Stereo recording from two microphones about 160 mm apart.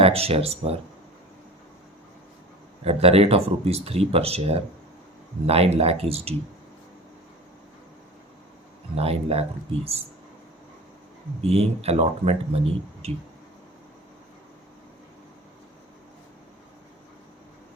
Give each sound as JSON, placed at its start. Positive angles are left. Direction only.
{"t": 0.0, "sound": "speech", "side_deg": -40}
{"t": 2.8, "sound": "speech", "side_deg": -40}
{"t": 9.0, "sound": "speech", "side_deg": -40}
{"t": 11.4, "sound": "speech", "side_deg": -40}